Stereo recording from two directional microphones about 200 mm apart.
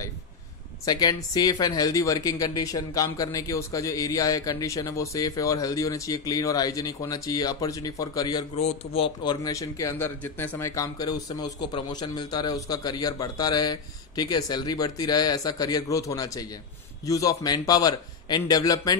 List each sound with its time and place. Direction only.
0.8 s speech: 20° left (ahead or behind)
8.5 s speech: 30° left (ahead or behind)